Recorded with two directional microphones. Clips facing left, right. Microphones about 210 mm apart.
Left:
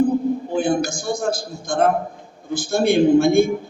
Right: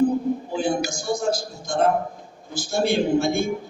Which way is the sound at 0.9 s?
55° left (ahead or behind).